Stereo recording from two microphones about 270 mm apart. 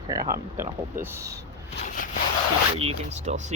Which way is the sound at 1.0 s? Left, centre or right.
Centre.